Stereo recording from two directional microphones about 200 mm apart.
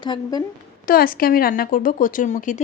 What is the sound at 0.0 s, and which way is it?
Speech, 20° left (ahead or behind).